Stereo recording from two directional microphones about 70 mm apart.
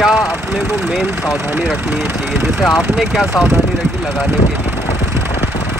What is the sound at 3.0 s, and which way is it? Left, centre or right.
Speech, centre.